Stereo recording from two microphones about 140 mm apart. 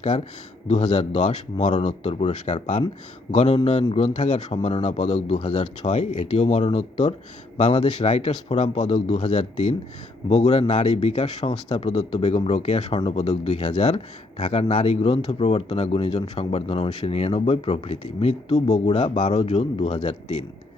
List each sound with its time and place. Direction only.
0.7 s speech: 55° left (ahead or behind)